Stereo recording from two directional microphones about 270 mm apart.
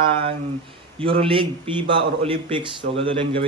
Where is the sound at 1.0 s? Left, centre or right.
Centre.